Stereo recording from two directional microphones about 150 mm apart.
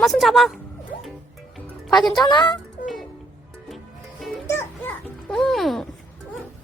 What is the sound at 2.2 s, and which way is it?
Speech, 30° left (ahead or behind).